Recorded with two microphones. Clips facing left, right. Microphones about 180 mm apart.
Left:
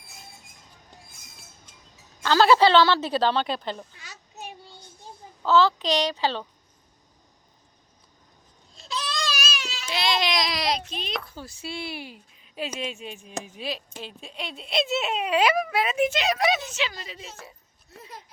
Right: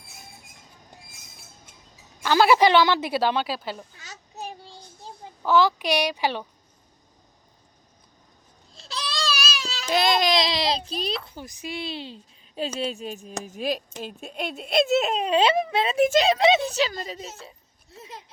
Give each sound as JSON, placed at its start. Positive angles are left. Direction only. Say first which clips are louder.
{"t": 2.2, "sound": "a woman's voice", "louder": "even", "side_deg": -15}
{"t": 4.0, "sound": "child singing", "louder": "right 4 dB", "side_deg": -40}
{"t": 5.4, "sound": "a woman's voice", "louder": "even", "side_deg": -15}
{"t": 8.9, "sound": "baby cry", "louder": "right 1 dB", "side_deg": -35}
{"t": 10.3, "sound": "child singing", "louder": "right 3 dB", "side_deg": -25}
{"t": 11.3, "sound": "a woman's voice", "louder": "right 1 dB", "side_deg": -15}
{"t": 16.0, "sound": "a woman's voice", "louder": "right 7 dB", "side_deg": -40}
{"t": 16.2, "sound": "a woman's voice", "louder": "right 5 dB", "side_deg": -25}
{"t": 17.9, "sound": "speech", "louder": "right 2 dB", "side_deg": -25}